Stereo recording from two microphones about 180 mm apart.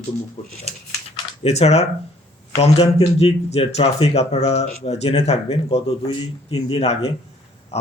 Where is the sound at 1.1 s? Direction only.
35° left (ahead or behind).